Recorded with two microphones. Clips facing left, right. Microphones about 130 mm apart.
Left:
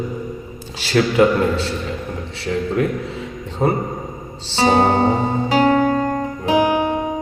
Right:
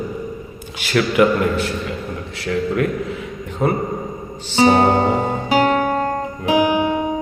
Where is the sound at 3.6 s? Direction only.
35° left (ahead or behind).